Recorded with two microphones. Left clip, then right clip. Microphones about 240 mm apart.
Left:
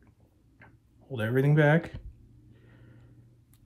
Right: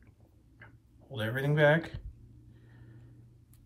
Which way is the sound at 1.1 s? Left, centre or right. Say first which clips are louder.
Left 5 dB; left.